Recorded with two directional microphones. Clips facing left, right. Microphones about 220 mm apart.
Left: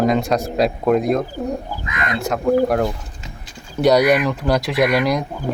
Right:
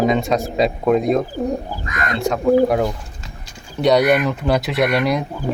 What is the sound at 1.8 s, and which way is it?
Speech, 45° right (ahead or behind).